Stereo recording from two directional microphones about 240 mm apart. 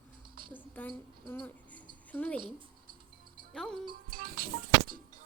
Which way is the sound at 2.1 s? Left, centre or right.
Centre.